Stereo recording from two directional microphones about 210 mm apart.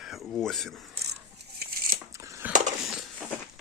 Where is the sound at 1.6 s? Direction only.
45° right (ahead or behind).